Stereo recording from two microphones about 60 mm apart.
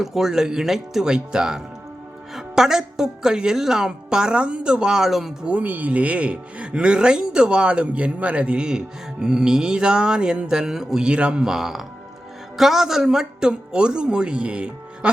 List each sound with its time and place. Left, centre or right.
0.0 s a woman's voice: centre
5.5 s a woman's voice: right
11.5 s a woman's voice: centre